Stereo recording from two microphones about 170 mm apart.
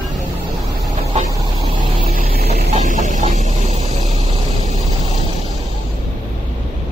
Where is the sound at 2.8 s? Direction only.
45° right (ahead or behind).